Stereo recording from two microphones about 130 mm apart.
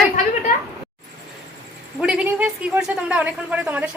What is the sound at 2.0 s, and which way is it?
A woman's voice, 5° right (ahead or behind).